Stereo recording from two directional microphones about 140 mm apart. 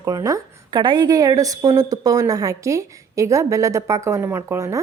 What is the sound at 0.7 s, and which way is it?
A woman's voice, 35° right (ahead or behind).